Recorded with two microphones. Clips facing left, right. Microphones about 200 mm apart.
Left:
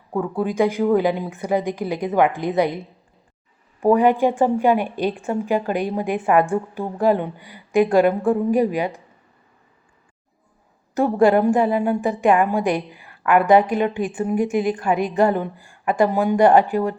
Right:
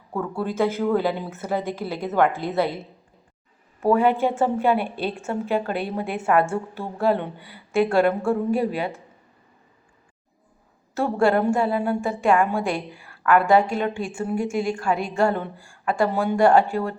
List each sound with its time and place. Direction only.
0.1 s a woman's voice: 15° left (ahead or behind)
10.9 s a woman's voice: 15° left (ahead or behind)